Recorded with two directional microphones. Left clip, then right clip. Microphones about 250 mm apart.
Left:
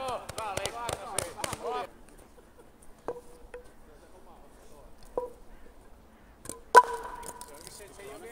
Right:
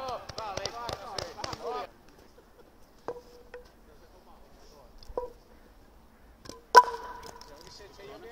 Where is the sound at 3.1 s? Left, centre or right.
Centre.